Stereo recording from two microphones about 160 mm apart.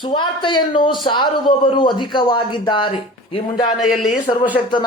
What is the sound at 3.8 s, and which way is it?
Speech, centre (ahead or behind).